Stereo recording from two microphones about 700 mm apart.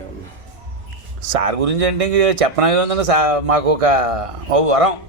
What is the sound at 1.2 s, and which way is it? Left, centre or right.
Speech, right.